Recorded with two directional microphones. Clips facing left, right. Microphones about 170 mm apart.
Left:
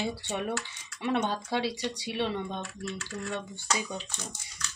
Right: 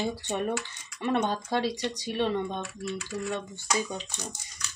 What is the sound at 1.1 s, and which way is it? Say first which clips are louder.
Speech: right 2 dB; 15° right (ahead or behind).